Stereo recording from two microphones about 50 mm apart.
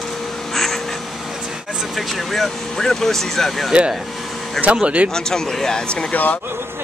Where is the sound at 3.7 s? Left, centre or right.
Centre.